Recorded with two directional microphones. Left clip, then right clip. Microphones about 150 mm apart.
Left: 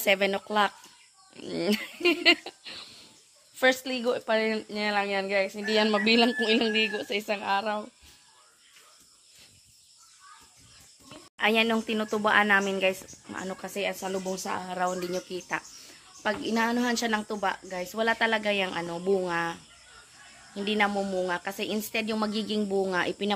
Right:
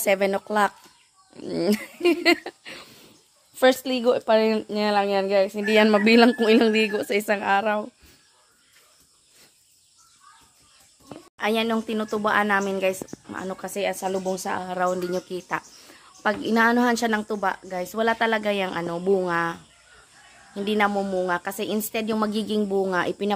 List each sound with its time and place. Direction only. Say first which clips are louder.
0.0 s a woman's voice: right 3 dB; 25° right (ahead or behind)
2.4 s a sound: right 3 dB; 45° right (ahead or behind)
3.5 s speech: right 5 dB; 40° right (ahead or behind)
11.3 s a woman's voice: even; 5° right (ahead or behind)